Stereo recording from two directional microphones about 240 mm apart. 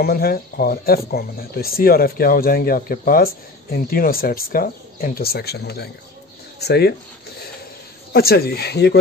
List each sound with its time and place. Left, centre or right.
0.0 s speech: left
8.1 s speech: left